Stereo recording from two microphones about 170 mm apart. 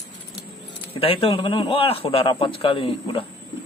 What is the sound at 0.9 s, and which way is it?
A man's voice, 35° left (ahead or behind).